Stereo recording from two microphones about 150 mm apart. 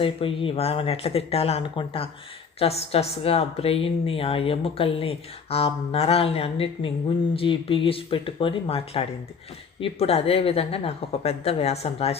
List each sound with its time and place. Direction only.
0.0 s a woman's voice: 35° left (ahead or behind)